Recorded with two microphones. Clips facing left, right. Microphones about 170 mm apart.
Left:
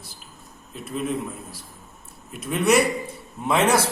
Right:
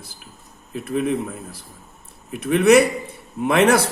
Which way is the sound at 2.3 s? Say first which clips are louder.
Right 6 dB; 60° right (ahead or behind).